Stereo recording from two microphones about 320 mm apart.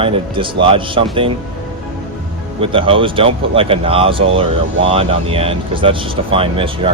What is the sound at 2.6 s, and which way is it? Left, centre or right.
Speech, centre.